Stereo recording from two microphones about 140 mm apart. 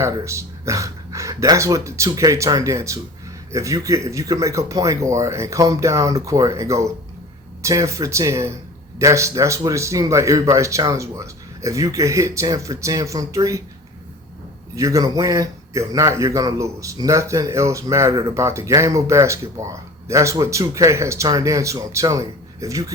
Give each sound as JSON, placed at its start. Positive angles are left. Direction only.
{"t": 0.0, "sound": "speech", "side_deg": -20}
{"t": 14.8, "sound": "speech", "side_deg": -25}